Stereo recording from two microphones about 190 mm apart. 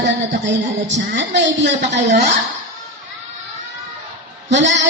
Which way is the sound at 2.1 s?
35° right (ahead or behind).